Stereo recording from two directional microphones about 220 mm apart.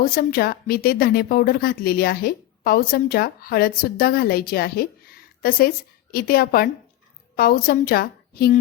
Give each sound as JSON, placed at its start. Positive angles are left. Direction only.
{"t": 0.0, "sound": "a woman's voice", "side_deg": 40}